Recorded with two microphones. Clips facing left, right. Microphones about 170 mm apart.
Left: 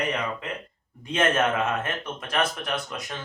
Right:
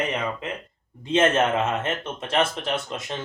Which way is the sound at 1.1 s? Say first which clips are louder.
Right 3 dB; 25° right (ahead or behind).